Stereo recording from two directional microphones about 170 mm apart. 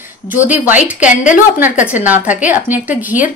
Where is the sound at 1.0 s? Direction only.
45° left (ahead or behind).